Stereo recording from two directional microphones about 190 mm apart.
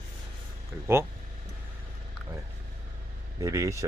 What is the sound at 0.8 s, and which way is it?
Speech, 15° right (ahead or behind).